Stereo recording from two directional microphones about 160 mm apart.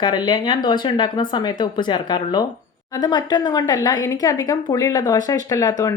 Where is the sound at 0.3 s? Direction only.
30° left (ahead or behind).